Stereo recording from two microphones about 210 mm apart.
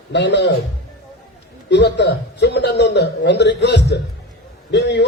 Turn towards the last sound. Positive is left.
turn(degrees=55)  # may be behind; listen again after turning